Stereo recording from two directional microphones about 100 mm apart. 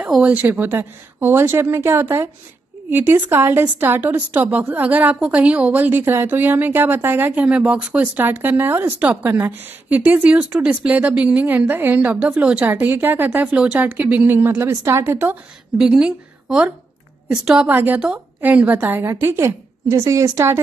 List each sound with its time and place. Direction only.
0.2 s a woman's voice: 15° right (ahead or behind)
15.8 s a woman's voice: 10° right (ahead or behind); by 20.6 s 25° right (ahead or behind)